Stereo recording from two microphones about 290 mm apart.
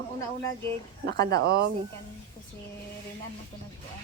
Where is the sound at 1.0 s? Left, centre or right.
Right.